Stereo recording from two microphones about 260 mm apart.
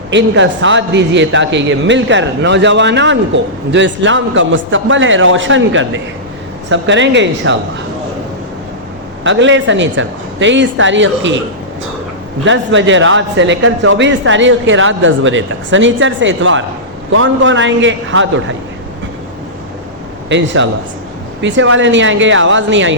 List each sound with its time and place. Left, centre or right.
0.1 s a man's voice: right
9.2 s a man's voice: right
12.5 s a man's voice: right
20.3 s a man's voice: right